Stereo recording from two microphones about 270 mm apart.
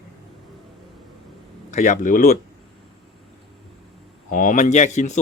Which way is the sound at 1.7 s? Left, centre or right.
Left.